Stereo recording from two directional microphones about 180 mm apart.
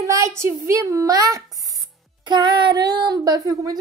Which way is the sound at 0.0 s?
15° right (ahead or behind).